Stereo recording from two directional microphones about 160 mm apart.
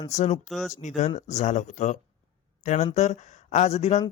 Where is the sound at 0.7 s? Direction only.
45° left (ahead or behind).